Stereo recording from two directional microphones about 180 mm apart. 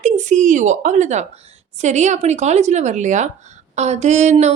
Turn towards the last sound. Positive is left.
turn(degrees=-40)  # may be behind; listen again after turning